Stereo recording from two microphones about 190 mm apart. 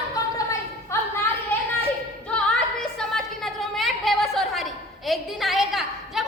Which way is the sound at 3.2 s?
Centre (ahead or behind).